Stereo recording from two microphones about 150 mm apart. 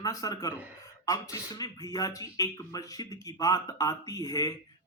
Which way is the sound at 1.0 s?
25° left (ahead or behind).